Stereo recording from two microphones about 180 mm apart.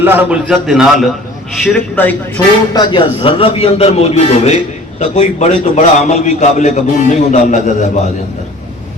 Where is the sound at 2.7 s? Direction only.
25° left (ahead or behind); by 7.9 s 45° left (ahead or behind).